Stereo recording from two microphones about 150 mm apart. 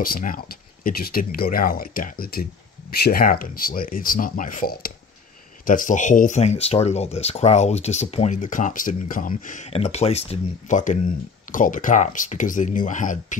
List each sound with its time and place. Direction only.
0.0 s speech: 70° left (ahead or behind)
9.7 s speech: 45° left (ahead or behind)